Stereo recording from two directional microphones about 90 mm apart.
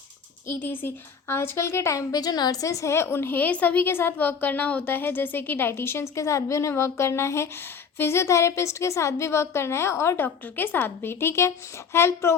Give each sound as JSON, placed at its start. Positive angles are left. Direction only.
{"t": 0.4, "sound": "a woman's voice", "side_deg": 25}